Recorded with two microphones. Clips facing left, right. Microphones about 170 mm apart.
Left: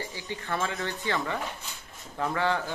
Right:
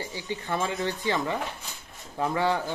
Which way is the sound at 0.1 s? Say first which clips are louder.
Right 2 dB; 20° right (ahead or behind).